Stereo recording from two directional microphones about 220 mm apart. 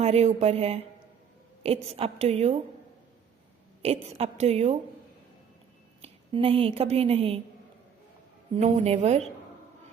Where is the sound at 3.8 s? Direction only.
25° right (ahead or behind).